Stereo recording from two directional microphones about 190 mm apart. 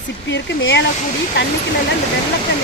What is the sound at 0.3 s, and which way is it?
Speech, 70° left (ahead or behind).